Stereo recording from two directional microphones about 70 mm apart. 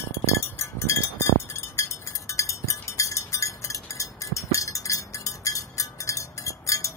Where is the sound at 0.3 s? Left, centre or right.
Left.